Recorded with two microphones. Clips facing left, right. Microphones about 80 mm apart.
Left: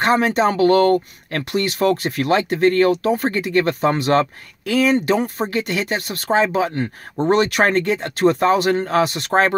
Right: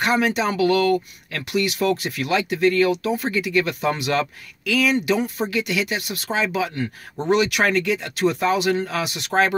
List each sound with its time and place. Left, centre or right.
0.0 s speech: left